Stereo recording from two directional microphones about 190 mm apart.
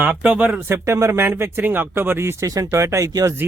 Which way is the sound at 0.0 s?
10° right (ahead or behind).